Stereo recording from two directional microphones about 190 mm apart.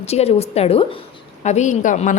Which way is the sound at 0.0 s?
35° left (ahead or behind).